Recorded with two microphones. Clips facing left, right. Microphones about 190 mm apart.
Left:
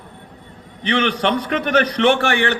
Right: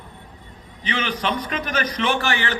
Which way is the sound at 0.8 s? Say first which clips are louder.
Left 6 dB; 70° left (ahead or behind).